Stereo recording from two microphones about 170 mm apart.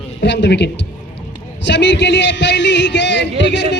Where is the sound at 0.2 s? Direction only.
90° left.